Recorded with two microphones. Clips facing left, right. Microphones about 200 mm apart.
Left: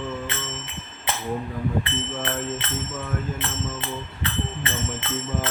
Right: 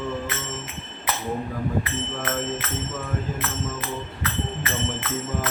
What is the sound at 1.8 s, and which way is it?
Jingle bell, 30° left (ahead or behind).